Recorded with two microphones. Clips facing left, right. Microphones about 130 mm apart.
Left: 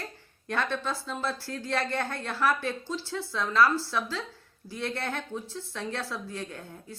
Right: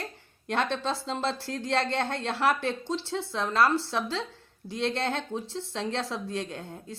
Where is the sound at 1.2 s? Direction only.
70° right (ahead or behind).